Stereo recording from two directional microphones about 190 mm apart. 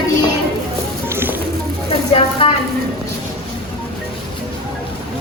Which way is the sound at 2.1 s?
30° left (ahead or behind).